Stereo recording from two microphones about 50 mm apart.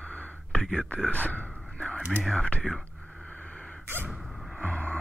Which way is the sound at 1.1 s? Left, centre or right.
Left.